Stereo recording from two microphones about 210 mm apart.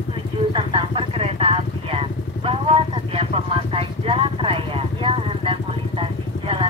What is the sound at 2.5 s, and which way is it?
Vehicle, 25° right (ahead or behind).